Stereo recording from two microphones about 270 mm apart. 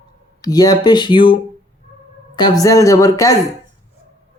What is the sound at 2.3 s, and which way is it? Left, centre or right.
Music, centre.